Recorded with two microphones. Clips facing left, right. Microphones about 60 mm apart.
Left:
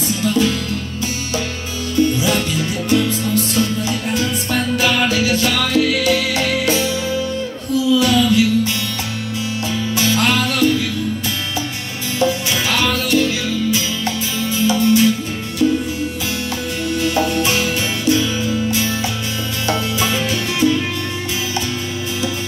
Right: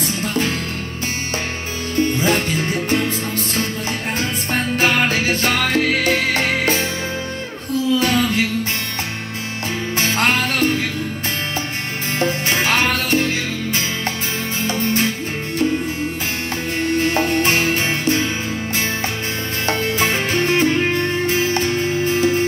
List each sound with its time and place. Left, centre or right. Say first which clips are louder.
0.1 s music: left 7 dB; right
2.0 s music: left 1 dB; right
9.9 s music: left 1 dB; right
12.2 s music: left 1 dB; right
17.1 s music: even; right